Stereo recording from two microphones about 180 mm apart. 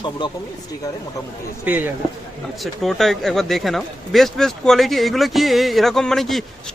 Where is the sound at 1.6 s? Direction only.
10° right (ahead or behind).